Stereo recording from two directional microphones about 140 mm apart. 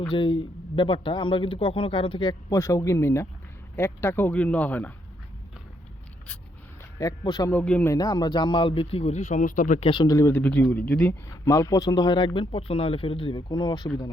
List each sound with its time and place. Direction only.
0.1 s speech: 35° left (ahead or behind)
2.5 s speech: 20° left (ahead or behind)
7.0 s speech: 25° left (ahead or behind)
7.5 s speech: 10° left (ahead or behind)
7.9 s speech: 25° left (ahead or behind); by 9.8 s 65° left (ahead or behind)
9.8 s speech: 40° left (ahead or behind)
10.1 s speech: 20° left (ahead or behind)
11.3 s speech: 20° left (ahead or behind)